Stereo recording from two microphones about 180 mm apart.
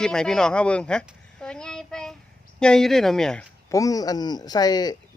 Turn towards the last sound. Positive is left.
turn(degrees=20)  # may be behind; listen again after turning